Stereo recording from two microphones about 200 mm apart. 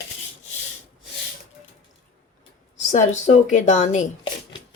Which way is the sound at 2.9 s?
35° left (ahead or behind).